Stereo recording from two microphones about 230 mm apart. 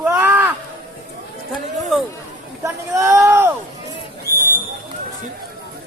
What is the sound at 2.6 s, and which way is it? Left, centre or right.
Speech, centre.